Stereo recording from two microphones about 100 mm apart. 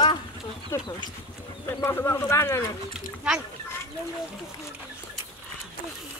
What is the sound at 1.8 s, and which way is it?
Speech, 25° left (ahead or behind).